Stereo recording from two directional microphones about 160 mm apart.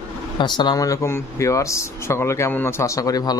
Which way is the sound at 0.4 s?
30° left (ahead or behind).